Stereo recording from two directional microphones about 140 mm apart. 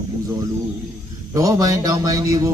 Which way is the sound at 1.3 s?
25° right (ahead or behind).